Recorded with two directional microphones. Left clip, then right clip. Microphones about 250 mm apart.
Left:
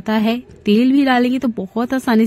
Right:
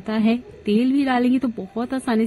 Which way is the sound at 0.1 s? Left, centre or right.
Left.